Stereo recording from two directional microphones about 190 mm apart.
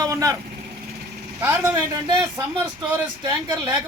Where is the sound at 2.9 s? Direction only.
20° right (ahead or behind).